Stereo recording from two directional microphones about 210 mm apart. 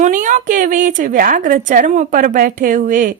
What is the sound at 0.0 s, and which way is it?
A woman's voice, 35° right (ahead or behind).